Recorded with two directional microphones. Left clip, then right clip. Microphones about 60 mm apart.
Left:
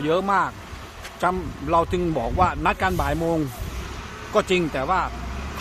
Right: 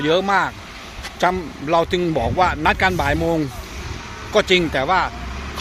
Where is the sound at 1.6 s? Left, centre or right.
Centre.